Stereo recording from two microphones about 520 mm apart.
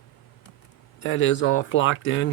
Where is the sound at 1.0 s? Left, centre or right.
Left.